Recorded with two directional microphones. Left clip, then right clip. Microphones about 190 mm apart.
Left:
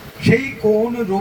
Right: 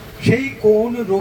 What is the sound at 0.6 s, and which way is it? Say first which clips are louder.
Speech: right 3 dB; 35° left (ahead or behind).